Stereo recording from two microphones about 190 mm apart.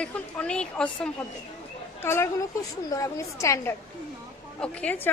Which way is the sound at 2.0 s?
15° left (ahead or behind).